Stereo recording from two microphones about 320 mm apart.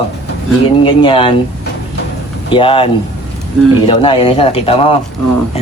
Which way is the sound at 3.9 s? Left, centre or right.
Centre.